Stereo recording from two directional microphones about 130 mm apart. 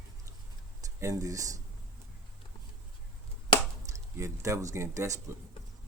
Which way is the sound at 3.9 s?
25° right (ahead or behind).